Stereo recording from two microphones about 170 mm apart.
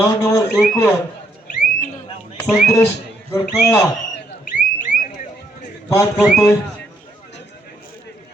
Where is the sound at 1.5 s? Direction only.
55° left (ahead or behind).